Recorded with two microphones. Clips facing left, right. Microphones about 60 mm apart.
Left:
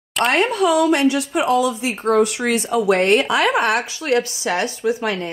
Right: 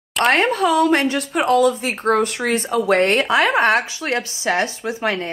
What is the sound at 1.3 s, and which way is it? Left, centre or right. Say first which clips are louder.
Speech: right 2 dB; right.